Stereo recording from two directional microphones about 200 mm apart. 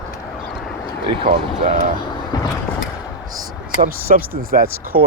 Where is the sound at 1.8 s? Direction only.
45° right (ahead or behind).